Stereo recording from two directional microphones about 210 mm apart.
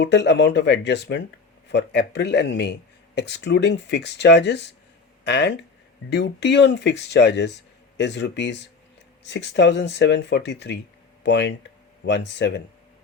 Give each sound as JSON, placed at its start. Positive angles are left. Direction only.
{"t": 0.0, "sound": "a man's voice", "side_deg": 55}